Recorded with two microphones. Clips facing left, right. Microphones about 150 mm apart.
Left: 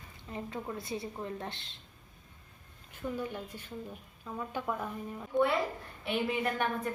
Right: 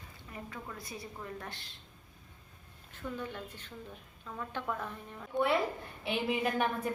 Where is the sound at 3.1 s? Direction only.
10° left (ahead or behind).